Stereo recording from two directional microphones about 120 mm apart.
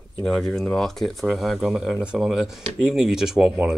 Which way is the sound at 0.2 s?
5° left (ahead or behind).